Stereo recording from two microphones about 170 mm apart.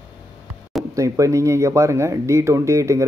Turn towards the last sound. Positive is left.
turn(degrees=-15)  # may be behind; listen again after turning